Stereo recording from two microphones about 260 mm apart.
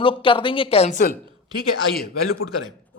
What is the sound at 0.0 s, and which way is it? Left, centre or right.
Speech, centre.